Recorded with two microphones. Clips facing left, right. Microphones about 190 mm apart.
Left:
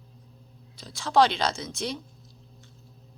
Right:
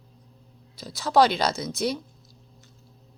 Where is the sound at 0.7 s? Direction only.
5° right (ahead or behind).